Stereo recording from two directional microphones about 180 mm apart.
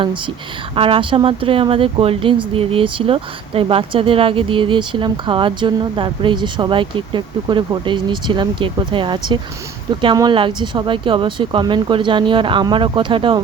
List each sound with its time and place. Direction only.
0.8 s speech: 30° right (ahead or behind)